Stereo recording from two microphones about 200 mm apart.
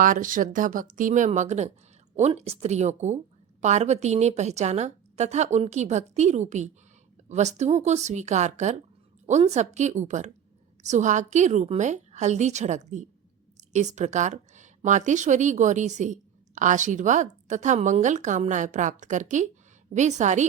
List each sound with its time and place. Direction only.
0.0 s a woman's voice: 40° right (ahead or behind)